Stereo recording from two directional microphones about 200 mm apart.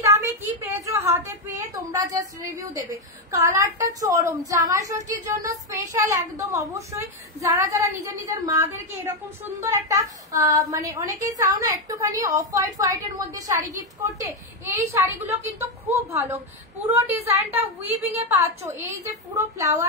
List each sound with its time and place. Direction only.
0.0 s a sound: 15° right (ahead or behind)
1.9 s speech: 15° right (ahead or behind)
3.3 s speech: 15° right (ahead or behind)
14.8 s speech: 15° right (ahead or behind)